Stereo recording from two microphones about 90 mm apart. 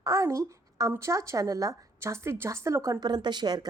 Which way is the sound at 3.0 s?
55° right (ahead or behind).